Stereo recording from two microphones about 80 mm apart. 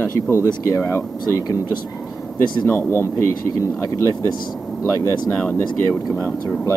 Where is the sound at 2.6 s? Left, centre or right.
Left.